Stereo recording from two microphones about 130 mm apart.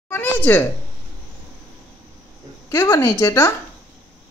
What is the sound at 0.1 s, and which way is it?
Speech, 15° left (ahead or behind).